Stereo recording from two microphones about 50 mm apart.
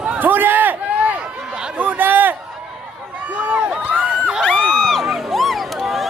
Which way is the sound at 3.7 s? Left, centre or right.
Centre.